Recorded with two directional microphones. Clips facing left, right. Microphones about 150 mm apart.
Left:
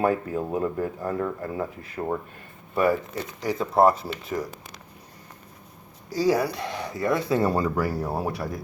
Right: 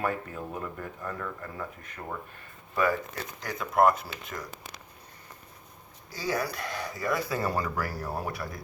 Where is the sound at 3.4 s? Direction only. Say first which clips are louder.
Left 4 dB; 30° left (ahead or behind).